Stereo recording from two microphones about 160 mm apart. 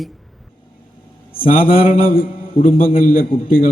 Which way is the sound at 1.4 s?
60° left (ahead or behind).